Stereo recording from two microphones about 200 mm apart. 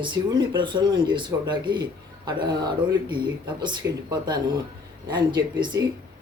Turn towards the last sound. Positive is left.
turn(degrees=-20)  # may be behind; listen again after turning